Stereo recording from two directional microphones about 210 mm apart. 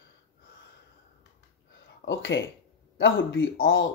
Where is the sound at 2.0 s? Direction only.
55° left (ahead or behind).